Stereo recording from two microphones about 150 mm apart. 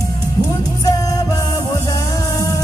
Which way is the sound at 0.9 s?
25° left (ahead or behind).